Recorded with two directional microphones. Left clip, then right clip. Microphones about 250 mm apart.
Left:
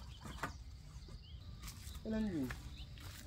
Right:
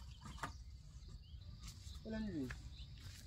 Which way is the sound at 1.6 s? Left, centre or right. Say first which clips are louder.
Left 4 dB; left.